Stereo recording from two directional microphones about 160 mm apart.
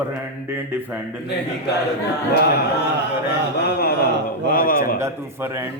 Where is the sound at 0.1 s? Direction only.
10° right (ahead or behind).